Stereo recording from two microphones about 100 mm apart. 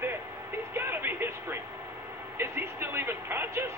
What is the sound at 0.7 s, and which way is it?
Speech, 20° right (ahead or behind).